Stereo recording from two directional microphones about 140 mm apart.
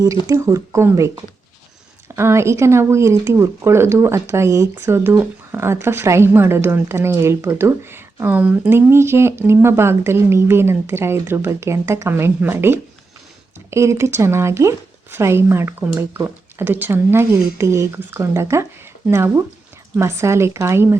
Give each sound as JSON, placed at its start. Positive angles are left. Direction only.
{"t": 0.0, "sound": "speech", "side_deg": -25}
{"t": 2.1, "sound": "speech", "side_deg": -20}
{"t": 20.0, "sound": "speech", "side_deg": -20}